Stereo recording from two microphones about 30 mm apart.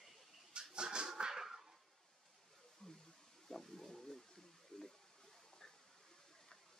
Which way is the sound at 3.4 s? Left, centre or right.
Centre.